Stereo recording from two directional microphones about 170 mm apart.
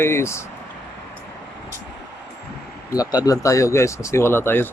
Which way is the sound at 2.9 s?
20° left (ahead or behind).